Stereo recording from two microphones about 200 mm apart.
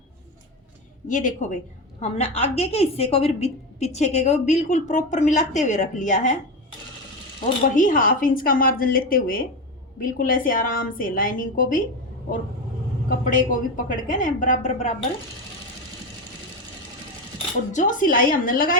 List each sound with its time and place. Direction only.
1.0 s a woman's voice: 40° left (ahead or behind)
7.8 s a woman's voice: 40° left (ahead or behind)
13.3 s a woman's voice: 40° left (ahead or behind)
17.7 s a woman's voice: 40° left (ahead or behind)